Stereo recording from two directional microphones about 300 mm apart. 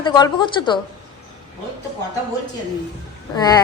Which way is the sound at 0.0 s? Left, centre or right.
Centre.